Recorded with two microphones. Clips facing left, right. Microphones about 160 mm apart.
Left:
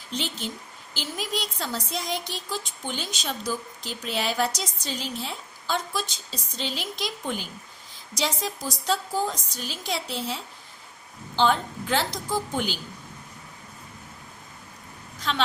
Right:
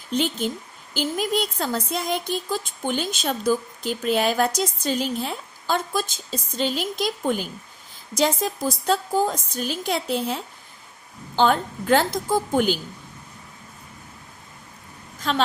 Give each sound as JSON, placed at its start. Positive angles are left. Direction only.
{"t": 0.1, "sound": "speech", "side_deg": -50}
{"t": 15.3, "sound": "speech", "side_deg": -45}